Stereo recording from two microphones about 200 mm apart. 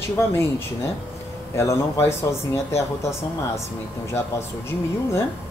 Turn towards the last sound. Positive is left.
turn(degrees=15)  # may be behind; listen again after turning